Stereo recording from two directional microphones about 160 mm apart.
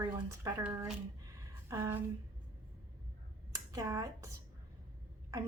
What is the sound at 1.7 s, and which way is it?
Speech, 15° right (ahead or behind).